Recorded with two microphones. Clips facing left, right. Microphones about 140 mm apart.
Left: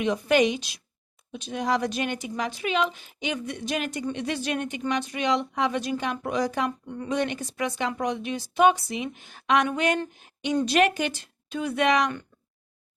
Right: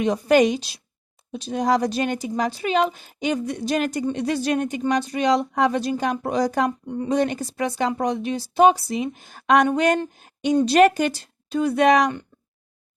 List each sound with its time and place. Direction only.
0.0 s speech: 35° right (ahead or behind)
6.7 s speech: 20° right (ahead or behind)
7.1 s a woman's voice: 35° right (ahead or behind)